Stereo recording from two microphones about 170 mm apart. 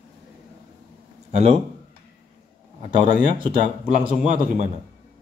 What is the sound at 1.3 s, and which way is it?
Speech, 40° right (ahead or behind).